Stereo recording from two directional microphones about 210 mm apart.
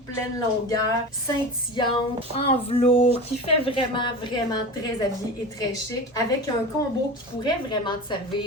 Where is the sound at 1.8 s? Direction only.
20° left (ahead or behind).